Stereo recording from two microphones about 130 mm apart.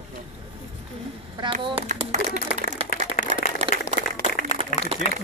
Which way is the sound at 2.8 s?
90° left.